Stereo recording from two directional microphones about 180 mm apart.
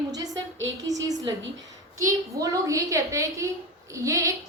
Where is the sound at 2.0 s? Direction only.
15° right (ahead or behind).